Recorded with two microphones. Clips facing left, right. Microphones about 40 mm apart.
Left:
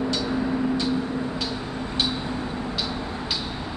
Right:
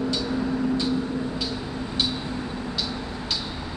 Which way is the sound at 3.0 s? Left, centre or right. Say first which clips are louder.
Left 2 dB; left.